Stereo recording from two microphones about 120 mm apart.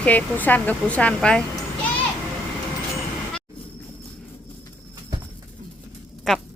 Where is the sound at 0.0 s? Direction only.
10° left (ahead or behind).